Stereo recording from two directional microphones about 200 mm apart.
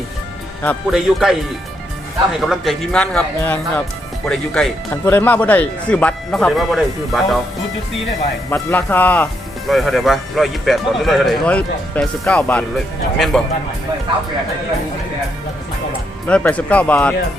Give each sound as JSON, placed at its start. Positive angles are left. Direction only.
{"t": 0.6, "sound": "speech", "side_deg": 5}
{"t": 2.4, "sound": "speech", "side_deg": 0}
{"t": 8.4, "sound": "speech", "side_deg": 10}
{"t": 16.3, "sound": "speech", "side_deg": 5}